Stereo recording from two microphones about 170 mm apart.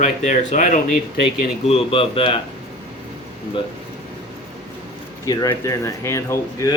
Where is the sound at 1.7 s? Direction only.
35° left (ahead or behind).